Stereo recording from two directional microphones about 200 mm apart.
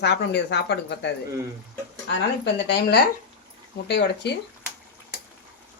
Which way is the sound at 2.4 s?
55° left (ahead or behind).